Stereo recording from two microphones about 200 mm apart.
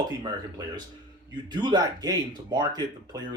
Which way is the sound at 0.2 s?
20° right (ahead or behind).